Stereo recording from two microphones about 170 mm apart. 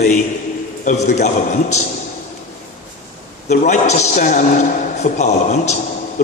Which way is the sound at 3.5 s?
45° left (ahead or behind).